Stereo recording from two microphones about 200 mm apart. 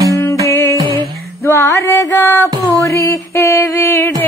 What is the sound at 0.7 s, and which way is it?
Music, 20° right (ahead or behind).